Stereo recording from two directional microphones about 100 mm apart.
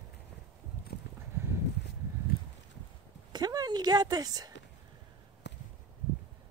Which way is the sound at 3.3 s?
40° right (ahead or behind).